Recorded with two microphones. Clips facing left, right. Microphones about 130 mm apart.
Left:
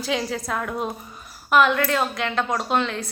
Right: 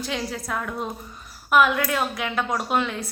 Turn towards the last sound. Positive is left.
turn(degrees=-5)  # may be behind; listen again after turning